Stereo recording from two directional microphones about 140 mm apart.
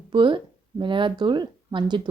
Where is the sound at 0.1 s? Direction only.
35° right (ahead or behind).